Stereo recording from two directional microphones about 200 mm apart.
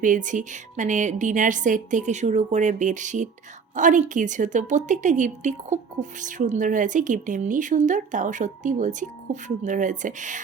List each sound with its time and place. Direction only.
0.0 s a woman's voice: 40° right (ahead or behind)